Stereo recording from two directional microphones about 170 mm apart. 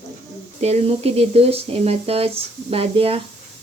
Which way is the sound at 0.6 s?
35° right (ahead or behind).